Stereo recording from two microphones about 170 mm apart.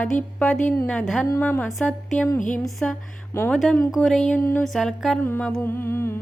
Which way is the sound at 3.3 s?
15° left (ahead or behind).